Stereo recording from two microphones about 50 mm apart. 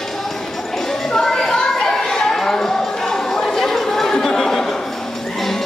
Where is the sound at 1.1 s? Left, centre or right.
Centre.